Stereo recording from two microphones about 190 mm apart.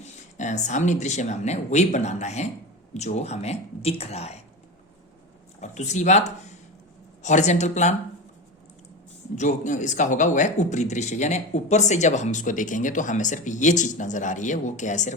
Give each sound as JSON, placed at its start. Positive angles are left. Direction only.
{"t": 0.0, "sound": "speech", "side_deg": 40}
{"t": 5.5, "sound": "speech", "side_deg": 40}
{"t": 9.3, "sound": "speech", "side_deg": 40}